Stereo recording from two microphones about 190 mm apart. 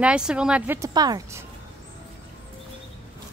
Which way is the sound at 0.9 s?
20° right (ahead or behind).